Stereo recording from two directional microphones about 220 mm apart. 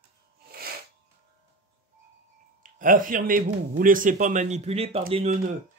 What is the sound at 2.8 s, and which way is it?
Speech, 40° right (ahead or behind).